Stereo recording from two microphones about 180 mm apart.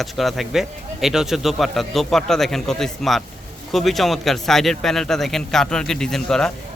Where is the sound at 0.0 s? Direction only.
Centre (ahead or behind).